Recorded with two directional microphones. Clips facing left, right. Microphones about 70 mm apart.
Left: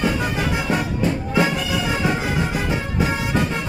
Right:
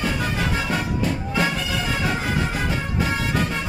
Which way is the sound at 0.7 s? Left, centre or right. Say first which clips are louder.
Left 2 dB; centre.